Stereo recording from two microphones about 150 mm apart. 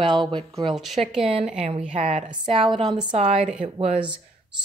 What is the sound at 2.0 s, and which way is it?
A woman's voice, 45° right (ahead or behind).